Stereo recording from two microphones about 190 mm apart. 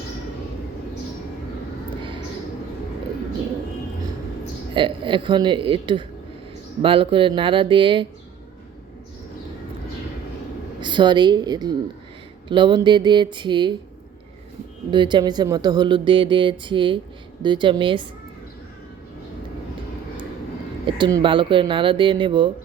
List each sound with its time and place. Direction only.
4.7 s speech: 25° right (ahead or behind)
10.8 s a woman's voice: 25° right (ahead or behind)
14.8 s speech: 25° right (ahead or behind)
20.8 s speech: 25° right (ahead or behind)